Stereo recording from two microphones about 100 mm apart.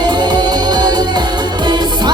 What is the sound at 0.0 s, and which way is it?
Music, 50° right (ahead or behind).